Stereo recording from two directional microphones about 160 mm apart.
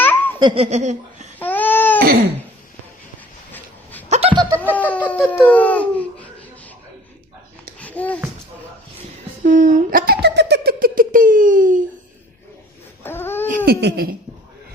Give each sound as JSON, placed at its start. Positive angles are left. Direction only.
{"t": 0.0, "sound": "laughter", "side_deg": 10}
{"t": 0.3, "sound": "laughter", "side_deg": -30}
{"t": 0.6, "sound": "laughter", "side_deg": -45}
{"t": 1.4, "sound": "baby cry", "side_deg": 10}
{"t": 4.1, "sound": "laughter", "side_deg": -35}
{"t": 4.6, "sound": "speech", "side_deg": 10}
{"t": 7.8, "sound": "babbling", "side_deg": 10}
{"t": 9.4, "sound": "a sound", "side_deg": -55}
{"t": 13.0, "sound": "a sound", "side_deg": 15}
{"t": 13.7, "sound": "a sound", "side_deg": -75}